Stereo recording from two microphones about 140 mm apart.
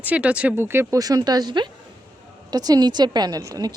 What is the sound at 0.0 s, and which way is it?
Speech, 10° right (ahead or behind).